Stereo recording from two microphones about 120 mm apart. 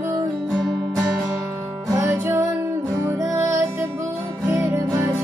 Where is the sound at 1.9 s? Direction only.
25° right (ahead or behind).